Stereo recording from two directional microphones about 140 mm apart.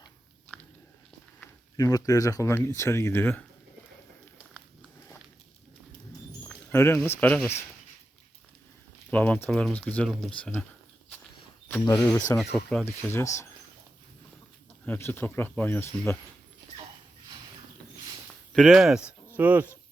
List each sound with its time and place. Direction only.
1.7 s speech: 25° left (ahead or behind)
6.4 s a sound: 5° left (ahead or behind)
6.7 s speech: 15° left (ahead or behind)
9.0 s speech: 10° left (ahead or behind)
11.9 s speech: 25° left (ahead or behind)
12.5 s speech: 5° left (ahead or behind)
12.8 s speech: 15° left (ahead or behind)
14.8 s speech: 15° left (ahead or behind)
18.5 s speech: centre (ahead or behind)